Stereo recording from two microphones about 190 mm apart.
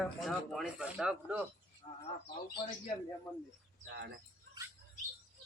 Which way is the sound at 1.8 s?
20° left (ahead or behind).